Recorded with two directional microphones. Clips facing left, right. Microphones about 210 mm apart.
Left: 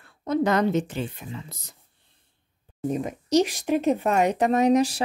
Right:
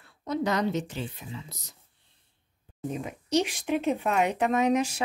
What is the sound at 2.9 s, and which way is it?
A woman's voice, 40° left (ahead or behind).